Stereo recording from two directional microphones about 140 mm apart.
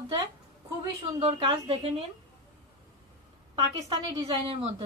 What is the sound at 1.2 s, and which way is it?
Speech, 40° right (ahead or behind).